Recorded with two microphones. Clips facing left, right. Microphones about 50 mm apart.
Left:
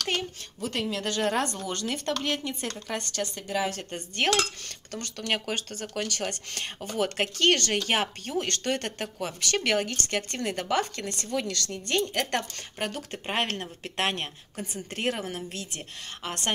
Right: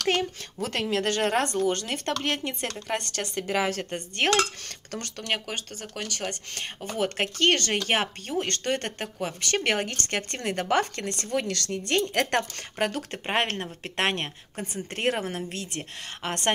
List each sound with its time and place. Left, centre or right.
0.1 s a sound: right
0.8 s speech: right
3.4 s a woman's voice: right
3.9 s speech: right
4.6 s speech: right
5.3 s speech: centre
7.3 s speech: right
13.2 s speech: right